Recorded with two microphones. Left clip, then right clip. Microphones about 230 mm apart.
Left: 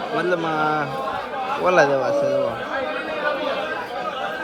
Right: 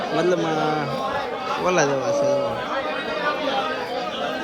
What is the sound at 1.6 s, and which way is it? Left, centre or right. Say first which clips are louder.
Speech: left 4 dB; centre.